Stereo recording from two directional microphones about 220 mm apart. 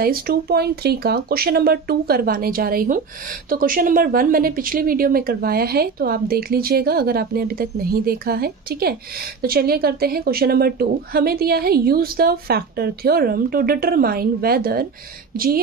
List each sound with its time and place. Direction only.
0.0 s a woman's voice: 45° right (ahead or behind)